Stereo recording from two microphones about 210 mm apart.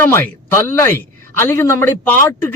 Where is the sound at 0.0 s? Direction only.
10° left (ahead or behind).